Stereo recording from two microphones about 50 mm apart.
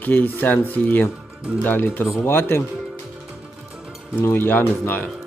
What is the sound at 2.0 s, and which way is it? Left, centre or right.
Cutlery, left.